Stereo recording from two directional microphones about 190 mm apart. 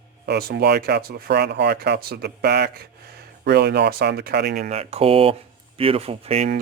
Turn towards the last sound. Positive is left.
turn(degrees=-30)  # may be behind; listen again after turning